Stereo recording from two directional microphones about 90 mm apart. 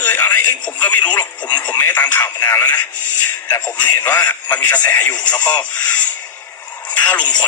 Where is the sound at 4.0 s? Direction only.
20° left (ahead or behind).